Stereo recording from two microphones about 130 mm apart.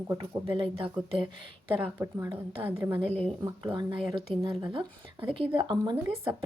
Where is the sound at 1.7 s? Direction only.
20° right (ahead or behind).